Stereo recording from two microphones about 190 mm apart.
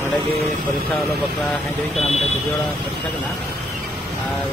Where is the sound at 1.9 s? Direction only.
35° left (ahead or behind).